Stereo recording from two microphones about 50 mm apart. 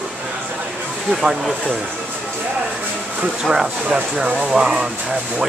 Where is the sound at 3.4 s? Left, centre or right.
Centre.